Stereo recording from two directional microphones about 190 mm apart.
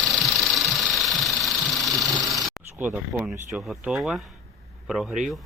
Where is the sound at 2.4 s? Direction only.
5° right (ahead or behind).